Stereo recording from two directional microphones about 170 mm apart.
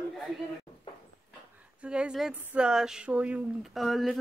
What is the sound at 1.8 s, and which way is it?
Speech, 5° right (ahead or behind).